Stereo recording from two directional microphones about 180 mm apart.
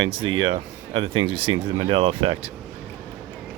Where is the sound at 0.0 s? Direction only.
30° right (ahead or behind).